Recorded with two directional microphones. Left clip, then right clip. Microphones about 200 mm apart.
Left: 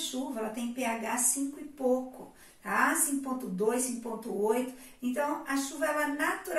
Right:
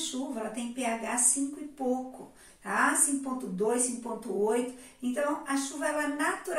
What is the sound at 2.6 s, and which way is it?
Speech, centre (ahead or behind).